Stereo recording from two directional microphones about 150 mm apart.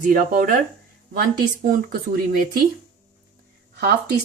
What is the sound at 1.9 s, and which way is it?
Speech, 70° right (ahead or behind).